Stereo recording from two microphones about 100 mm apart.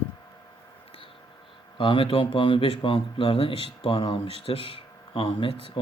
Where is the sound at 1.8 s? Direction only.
60° left (ahead or behind).